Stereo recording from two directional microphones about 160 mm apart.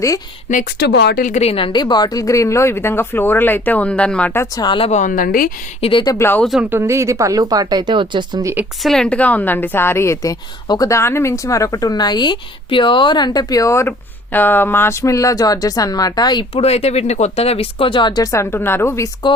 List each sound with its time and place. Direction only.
0.8 s speech: 90° left
1.3 s a woman's voice: 40° left (ahead or behind); by 4.4 s 10° left (ahead or behind)
4.5 s a woman's voice: 30° left (ahead or behind)
4.9 s a woman's voice: 50° left (ahead or behind)
5.8 s speech: 30° left (ahead or behind)
6.1 s a woman's voice: 15° left (ahead or behind)
6.4 s speech: centre (ahead or behind)
6.7 s speech: 15° right (ahead or behind)
8.8 s a woman's voice: 5° left (ahead or behind); by 16.5 s 25° left (ahead or behind)
16.6 s speech: 40° left (ahead or behind); by 19.0 s 15° left (ahead or behind)
19.2 s a woman's voice: 25° left (ahead or behind)